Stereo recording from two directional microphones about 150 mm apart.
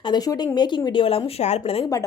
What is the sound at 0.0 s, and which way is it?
A woman's voice, 25° left (ahead or behind).